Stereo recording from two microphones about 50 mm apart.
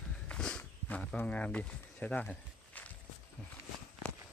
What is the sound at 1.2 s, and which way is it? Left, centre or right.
Speech, left.